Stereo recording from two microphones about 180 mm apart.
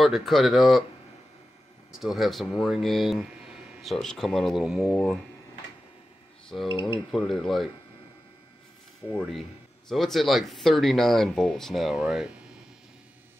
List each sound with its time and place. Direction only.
0.0 s speech: centre (ahead or behind)
1.9 s speech: centre (ahead or behind)
6.7 s speech: 25° left (ahead or behind)
7.1 s speech: centre (ahead or behind)
9.3 s speech: centre (ahead or behind)